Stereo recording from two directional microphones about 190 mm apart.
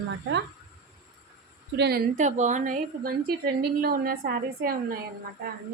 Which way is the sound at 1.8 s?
55° right (ahead or behind).